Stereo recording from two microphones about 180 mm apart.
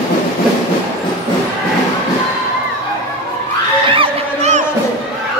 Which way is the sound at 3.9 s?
35° right (ahead or behind).